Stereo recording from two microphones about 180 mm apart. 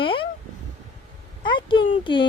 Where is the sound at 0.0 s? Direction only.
30° left (ahead or behind).